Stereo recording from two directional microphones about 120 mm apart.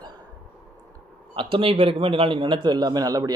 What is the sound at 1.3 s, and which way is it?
Speech, 45° right (ahead or behind).